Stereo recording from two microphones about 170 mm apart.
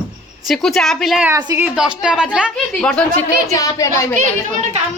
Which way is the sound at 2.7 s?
5° left (ahead or behind).